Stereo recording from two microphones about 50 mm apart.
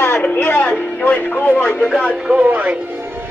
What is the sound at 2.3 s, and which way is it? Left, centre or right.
Speech, right.